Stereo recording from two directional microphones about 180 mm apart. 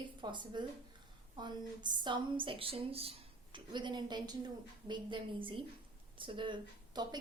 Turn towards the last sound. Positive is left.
turn(degrees=-25)  # may be behind; listen again after turning